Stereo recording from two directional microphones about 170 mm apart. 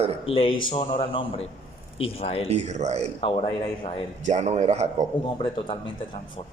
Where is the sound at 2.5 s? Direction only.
40° right (ahead or behind).